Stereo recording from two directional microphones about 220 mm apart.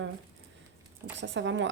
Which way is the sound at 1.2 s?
55° right (ahead or behind).